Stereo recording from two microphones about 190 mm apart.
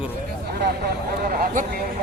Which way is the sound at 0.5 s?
55° right (ahead or behind).